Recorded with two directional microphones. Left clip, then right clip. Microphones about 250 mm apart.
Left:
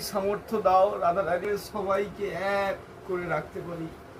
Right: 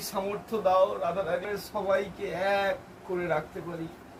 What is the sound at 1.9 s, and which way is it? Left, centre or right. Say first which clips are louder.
Speech: even; centre.